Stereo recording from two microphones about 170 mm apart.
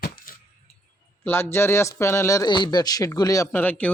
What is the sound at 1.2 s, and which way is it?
A man's voice, 15° left (ahead or behind).